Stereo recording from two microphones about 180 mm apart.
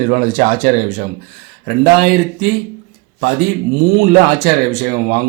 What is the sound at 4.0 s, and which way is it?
Speech, 55° right (ahead or behind).